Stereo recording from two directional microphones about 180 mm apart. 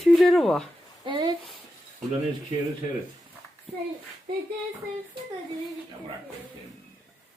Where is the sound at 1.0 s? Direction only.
25° right (ahead or behind).